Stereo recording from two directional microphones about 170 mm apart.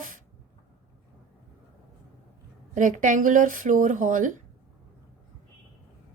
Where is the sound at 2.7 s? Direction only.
50° right (ahead or behind).